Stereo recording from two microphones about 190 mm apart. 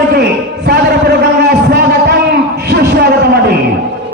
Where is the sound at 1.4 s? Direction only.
60° right (ahead or behind).